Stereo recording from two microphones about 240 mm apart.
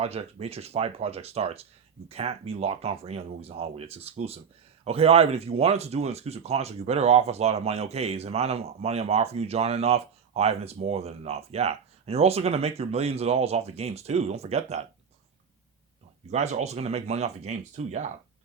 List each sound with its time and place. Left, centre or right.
0.0 s speech: right
16.3 s speech: right